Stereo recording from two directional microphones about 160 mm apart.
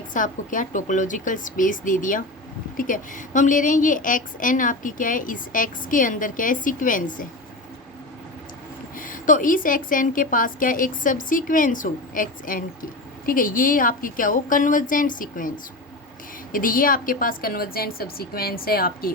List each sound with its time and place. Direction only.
0.1 s a woman's voice: 55° left (ahead or behind)
9.0 s a woman's voice: 55° left (ahead or behind)